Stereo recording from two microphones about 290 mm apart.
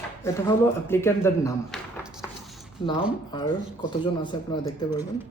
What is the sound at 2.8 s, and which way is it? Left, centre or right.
A man's voice, centre.